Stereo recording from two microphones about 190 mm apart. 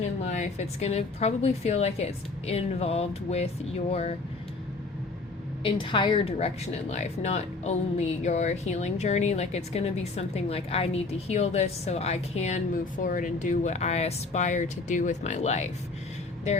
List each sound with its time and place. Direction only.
0.0 s a woman's voice: 40° left (ahead or behind)
5.6 s a woman's voice: 25° left (ahead or behind)